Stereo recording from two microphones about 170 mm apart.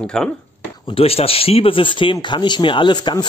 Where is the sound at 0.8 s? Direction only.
35° left (ahead or behind).